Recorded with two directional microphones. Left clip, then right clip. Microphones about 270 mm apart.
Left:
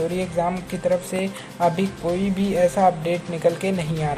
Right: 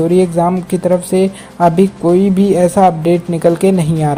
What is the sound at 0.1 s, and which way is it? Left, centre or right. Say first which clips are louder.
Speech: right 11 dB; right.